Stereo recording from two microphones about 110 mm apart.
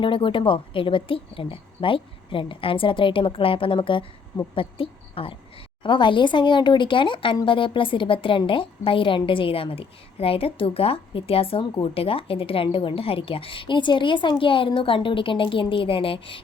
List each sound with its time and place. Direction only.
0.0 s a woman's voice: 50° left (ahead or behind)